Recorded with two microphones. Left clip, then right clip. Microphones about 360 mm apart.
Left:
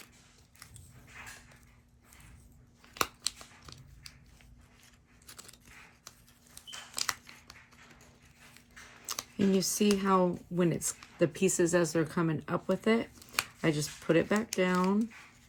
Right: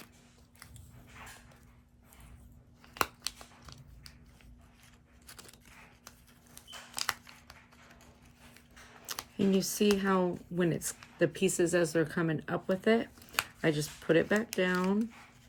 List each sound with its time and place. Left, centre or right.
2.9 s scissors: centre
5.2 s biting: centre
6.9 s crumpling: centre
9.1 s a sound: centre
9.5 s speech: centre